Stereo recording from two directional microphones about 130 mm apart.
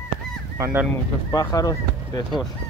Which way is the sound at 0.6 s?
20° right (ahead or behind).